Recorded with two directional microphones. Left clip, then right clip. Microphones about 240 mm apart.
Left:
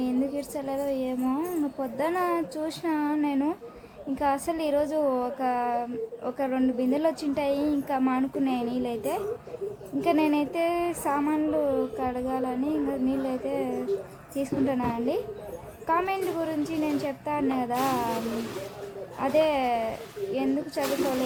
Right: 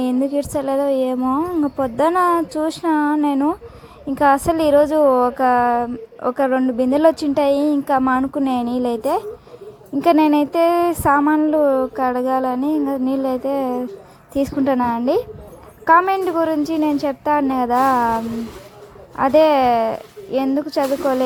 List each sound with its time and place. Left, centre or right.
0.0 s a woman's voice: right
19.1 s a woman's voice: right